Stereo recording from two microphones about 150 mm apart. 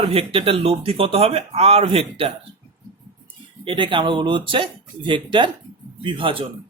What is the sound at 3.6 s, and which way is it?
Speech, 35° right (ahead or behind).